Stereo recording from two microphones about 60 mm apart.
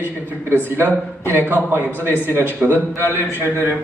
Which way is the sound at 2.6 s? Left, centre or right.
Left.